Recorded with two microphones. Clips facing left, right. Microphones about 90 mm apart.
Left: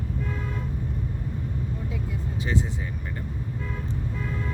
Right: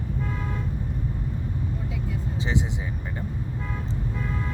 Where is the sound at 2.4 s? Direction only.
20° right (ahead or behind).